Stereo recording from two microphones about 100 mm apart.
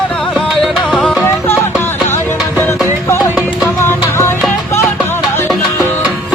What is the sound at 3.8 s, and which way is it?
Music, 25° left (ahead or behind).